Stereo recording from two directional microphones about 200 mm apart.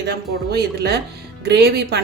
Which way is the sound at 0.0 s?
55° right (ahead or behind).